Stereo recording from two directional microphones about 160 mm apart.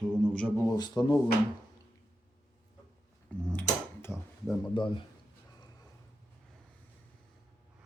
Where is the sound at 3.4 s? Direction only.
10° left (ahead or behind).